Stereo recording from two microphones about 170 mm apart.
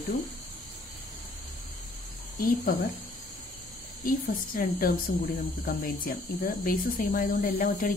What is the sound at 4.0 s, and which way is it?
Speech, 55° left (ahead or behind).